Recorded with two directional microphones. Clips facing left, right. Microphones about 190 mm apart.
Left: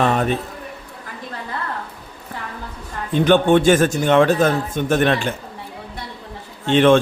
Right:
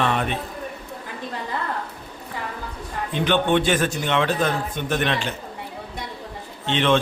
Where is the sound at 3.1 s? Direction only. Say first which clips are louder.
Left 6 dB; 45° left (ahead or behind).